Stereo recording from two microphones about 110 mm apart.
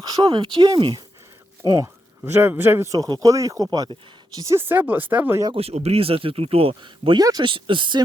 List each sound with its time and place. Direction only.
0.0 s speech: 40° right (ahead or behind)
1.6 s a man's voice: 30° right (ahead or behind)
4.6 s speech: 15° right (ahead or behind)
5.5 s speech: 70° right (ahead or behind); by 8.0 s 45° right (ahead or behind)